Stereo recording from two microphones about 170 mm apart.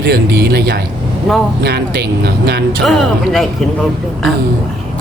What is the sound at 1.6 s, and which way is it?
Speech, 75° right (ahead or behind).